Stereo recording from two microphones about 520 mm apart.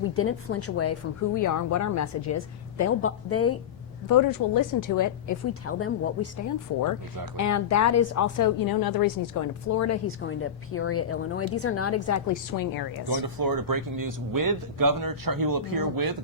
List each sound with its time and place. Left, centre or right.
0.1 s a woman's voice: left
4.1 s a woman's voice: left
7.3 s a woman's voice: left
13.1 s speech: right